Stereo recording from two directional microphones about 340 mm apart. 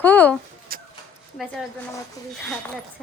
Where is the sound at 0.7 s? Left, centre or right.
Right.